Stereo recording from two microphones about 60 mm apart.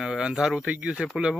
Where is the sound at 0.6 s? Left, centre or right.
Right.